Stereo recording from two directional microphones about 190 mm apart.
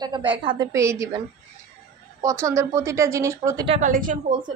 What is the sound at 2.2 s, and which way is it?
A woman's voice, 15° right (ahead or behind).